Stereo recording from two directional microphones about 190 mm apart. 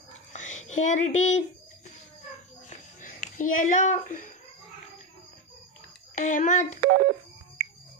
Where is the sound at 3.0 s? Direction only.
45° left (ahead or behind).